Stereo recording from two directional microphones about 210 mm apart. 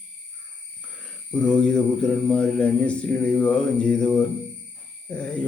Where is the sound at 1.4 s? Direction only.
5° left (ahead or behind).